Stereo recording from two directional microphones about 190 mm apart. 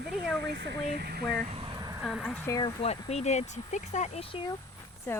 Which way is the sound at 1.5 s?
30° right (ahead or behind).